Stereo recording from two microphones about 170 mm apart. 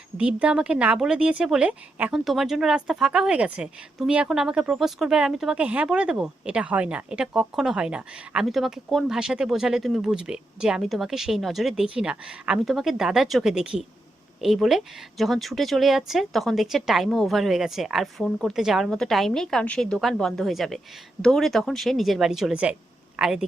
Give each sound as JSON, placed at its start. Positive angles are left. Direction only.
{"t": 0.2, "sound": "speech", "side_deg": -5}